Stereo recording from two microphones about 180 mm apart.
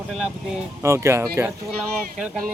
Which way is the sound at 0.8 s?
15° right (ahead or behind).